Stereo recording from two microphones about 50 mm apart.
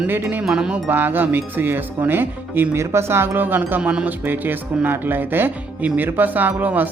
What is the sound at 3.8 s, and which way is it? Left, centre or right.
Speech, right.